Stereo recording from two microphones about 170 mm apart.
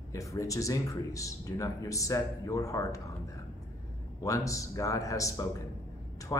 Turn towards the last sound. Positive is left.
turn(degrees=25)  # may be behind; listen again after turning